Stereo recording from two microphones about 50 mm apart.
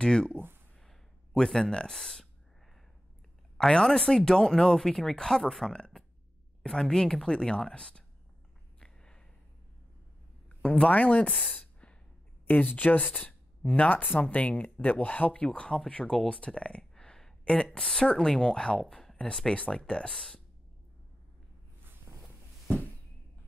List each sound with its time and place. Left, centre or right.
0.0 s speech: centre
1.4 s speech: centre
3.5 s speech: centre
8.7 s a sound: centre
10.8 s speech: left
11.5 s a sound: left
12.7 s speech: left
20.1 s speech: centre